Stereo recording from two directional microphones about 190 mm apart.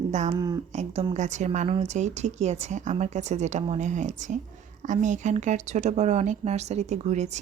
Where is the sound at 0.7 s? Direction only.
35° right (ahead or behind).